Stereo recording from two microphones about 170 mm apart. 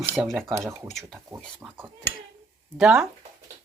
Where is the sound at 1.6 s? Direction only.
5° right (ahead or behind).